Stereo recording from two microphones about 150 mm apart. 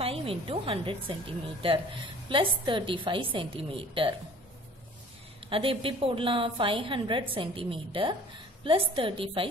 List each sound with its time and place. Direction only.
0.0 s speech: 40° right (ahead or behind)
2.2 s a woman's voice: 30° right (ahead or behind)
5.5 s a woman's voice: 35° right (ahead or behind)